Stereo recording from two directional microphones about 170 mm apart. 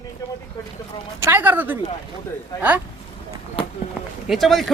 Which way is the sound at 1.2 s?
10° right (ahead or behind).